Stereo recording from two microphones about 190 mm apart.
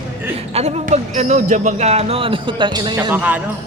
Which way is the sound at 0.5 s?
35° right (ahead or behind).